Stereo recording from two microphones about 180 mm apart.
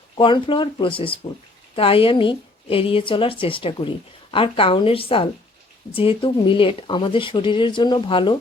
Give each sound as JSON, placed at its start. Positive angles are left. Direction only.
{"t": 0.2, "sound": "a woman's voice", "side_deg": 30}